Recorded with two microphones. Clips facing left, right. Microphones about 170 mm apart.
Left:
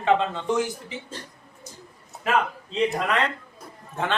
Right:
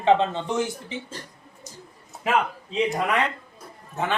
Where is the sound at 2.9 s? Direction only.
10° right (ahead or behind).